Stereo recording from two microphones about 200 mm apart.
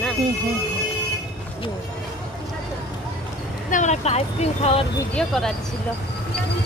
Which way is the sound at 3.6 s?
40° left (ahead or behind).